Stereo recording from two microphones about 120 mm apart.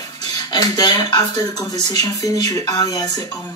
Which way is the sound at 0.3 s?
30° left (ahead or behind).